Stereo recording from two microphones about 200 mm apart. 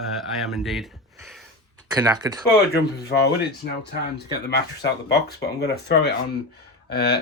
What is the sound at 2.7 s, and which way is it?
Speech, 55° left (ahead or behind).